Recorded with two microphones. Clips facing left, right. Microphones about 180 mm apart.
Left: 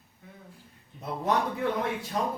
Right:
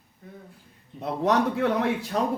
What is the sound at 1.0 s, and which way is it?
Speech, 80° right.